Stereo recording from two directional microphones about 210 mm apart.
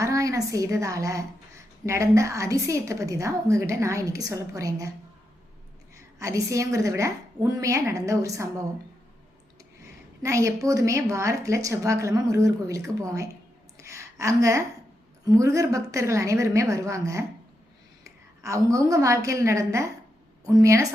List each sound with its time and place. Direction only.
0.0 s a woman's voice: 15° right (ahead or behind)
6.1 s a woman's voice: 15° right (ahead or behind)
10.2 s a woman's voice: 15° right (ahead or behind)
13.7 s a sound: 15° right (ahead or behind)
15.2 s a woman's voice: 15° right (ahead or behind)
18.4 s a woman's voice: 15° right (ahead or behind)